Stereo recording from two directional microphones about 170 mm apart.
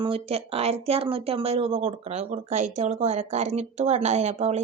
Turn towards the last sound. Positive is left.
turn(degrees=-40)  # may be behind; listen again after turning